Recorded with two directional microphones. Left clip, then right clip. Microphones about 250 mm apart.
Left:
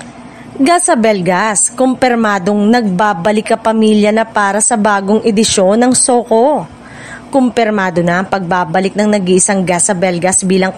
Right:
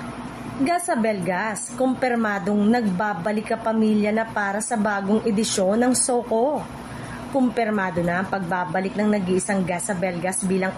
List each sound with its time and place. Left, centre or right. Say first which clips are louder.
0.7 s a woman's voice: left 12 dB; left